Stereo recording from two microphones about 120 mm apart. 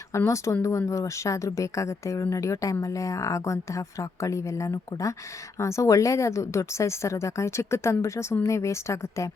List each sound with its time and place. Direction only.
0.3 s a woman's voice: 25° left (ahead or behind)